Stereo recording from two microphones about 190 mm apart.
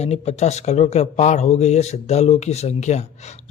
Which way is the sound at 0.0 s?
35° left (ahead or behind).